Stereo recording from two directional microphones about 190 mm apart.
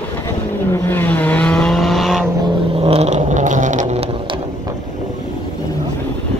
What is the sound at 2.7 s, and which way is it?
Vehicle, 30° right (ahead or behind).